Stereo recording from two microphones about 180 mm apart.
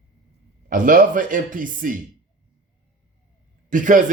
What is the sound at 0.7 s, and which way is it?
Speech, 50° right (ahead or behind).